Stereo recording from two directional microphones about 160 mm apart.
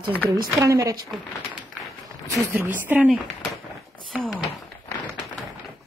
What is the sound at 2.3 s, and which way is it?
Speech, 15° right (ahead or behind).